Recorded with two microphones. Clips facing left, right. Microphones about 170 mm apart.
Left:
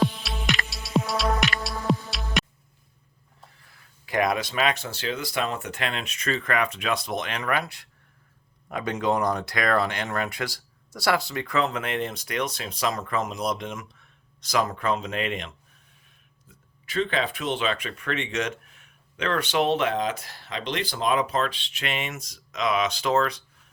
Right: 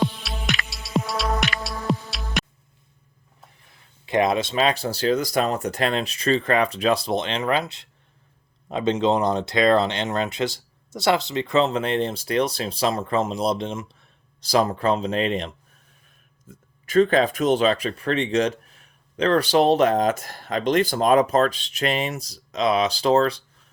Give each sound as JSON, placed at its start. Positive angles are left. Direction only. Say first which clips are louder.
{"t": 0.0, "sound": "music", "louder": "even", "side_deg": 0}
{"t": 3.6, "sound": "speech", "louder": "right 1 dB", "side_deg": -20}
{"t": 16.5, "sound": "speech", "louder": "right 12 dB", "side_deg": -45}